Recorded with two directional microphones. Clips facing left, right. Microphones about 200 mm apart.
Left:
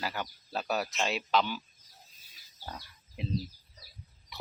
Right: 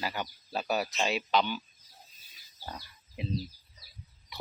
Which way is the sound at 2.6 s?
5° right (ahead or behind).